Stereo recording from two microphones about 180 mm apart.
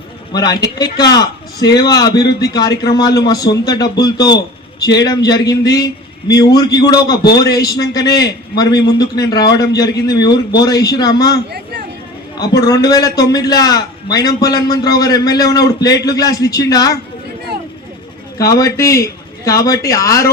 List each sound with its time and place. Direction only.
0.6 s a man's voice: 20° left (ahead or behind)
12.4 s a man's voice: 20° left (ahead or behind)
18.3 s speech: 20° left (ahead or behind)